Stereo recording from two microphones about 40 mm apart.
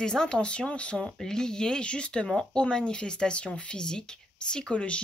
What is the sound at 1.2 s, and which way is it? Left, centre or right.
Speech, centre.